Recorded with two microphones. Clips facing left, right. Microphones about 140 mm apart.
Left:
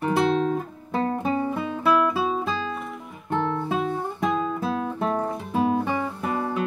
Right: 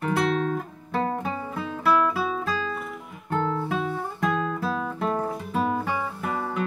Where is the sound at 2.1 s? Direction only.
25° left (ahead or behind).